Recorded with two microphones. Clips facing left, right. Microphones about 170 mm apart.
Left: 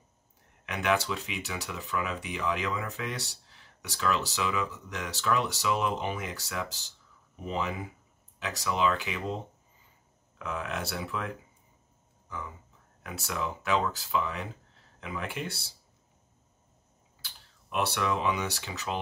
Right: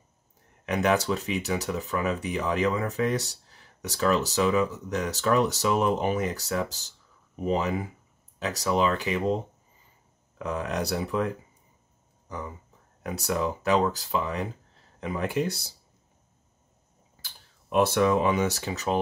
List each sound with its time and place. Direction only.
0.7 s speech: 40° right (ahead or behind)
10.4 s speech: 40° right (ahead or behind)
17.2 s speech: 45° right (ahead or behind)